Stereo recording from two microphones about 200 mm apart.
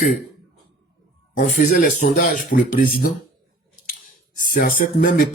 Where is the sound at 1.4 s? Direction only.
35° left (ahead or behind).